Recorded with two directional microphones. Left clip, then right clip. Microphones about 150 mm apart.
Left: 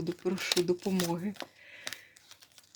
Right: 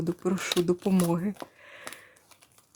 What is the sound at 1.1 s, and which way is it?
Speech, 30° right (ahead or behind).